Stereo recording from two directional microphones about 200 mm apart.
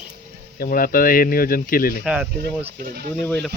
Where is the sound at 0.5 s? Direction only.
45° left (ahead or behind).